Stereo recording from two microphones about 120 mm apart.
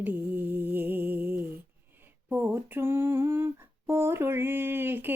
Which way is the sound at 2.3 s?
15° right (ahead or behind).